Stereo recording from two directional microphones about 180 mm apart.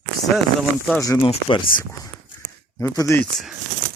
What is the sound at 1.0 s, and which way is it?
Speech, 20° left (ahead or behind).